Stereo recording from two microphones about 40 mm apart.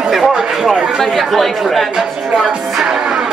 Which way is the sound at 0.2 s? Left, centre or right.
Centre.